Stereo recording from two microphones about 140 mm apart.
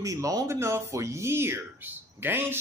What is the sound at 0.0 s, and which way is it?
Speech, 25° right (ahead or behind).